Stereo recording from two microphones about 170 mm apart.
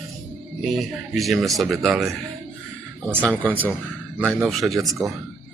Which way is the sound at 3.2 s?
5° left (ahead or behind).